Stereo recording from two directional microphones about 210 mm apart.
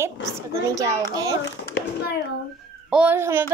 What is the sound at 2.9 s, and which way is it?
Speech, 10° right (ahead or behind).